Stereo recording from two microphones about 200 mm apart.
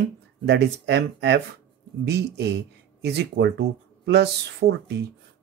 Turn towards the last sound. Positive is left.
turn(degrees=-55)  # may be behind; listen again after turning